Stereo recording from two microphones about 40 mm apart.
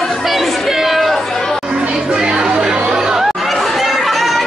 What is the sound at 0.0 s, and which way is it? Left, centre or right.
Chatter, centre.